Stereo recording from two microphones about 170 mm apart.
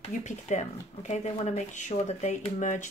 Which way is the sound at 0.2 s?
45° left (ahead or behind).